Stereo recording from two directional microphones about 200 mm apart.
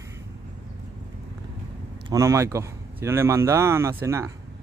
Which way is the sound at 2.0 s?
15° right (ahead or behind).